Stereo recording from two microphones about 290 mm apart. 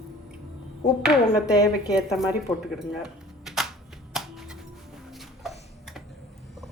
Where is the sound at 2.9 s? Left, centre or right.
Centre.